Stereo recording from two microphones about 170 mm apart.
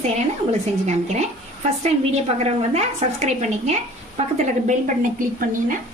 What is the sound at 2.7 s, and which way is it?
A woman's voice, 40° right (ahead or behind).